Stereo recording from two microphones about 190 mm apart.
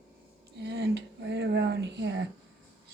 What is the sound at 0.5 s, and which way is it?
Speech, 60° right (ahead or behind).